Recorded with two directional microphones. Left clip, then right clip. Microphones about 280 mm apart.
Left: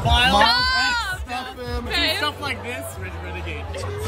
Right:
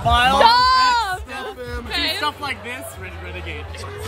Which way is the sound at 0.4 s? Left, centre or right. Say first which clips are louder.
Right 5 dB; right.